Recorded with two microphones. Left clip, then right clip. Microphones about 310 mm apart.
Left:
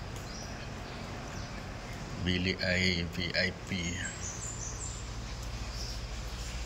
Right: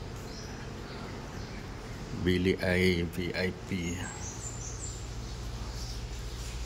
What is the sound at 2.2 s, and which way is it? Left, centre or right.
Speech, centre.